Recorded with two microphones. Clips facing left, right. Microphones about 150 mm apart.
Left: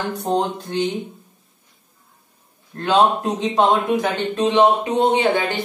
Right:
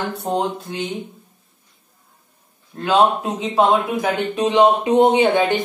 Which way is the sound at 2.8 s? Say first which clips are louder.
Even; 5° right (ahead or behind).